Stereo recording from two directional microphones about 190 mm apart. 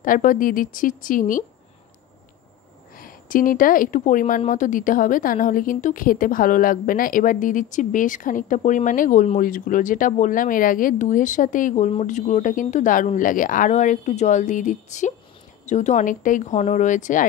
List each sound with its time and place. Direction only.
0.0 s a woman's voice: 45° left (ahead or behind)
3.0 s a woman's voice: 45° left (ahead or behind)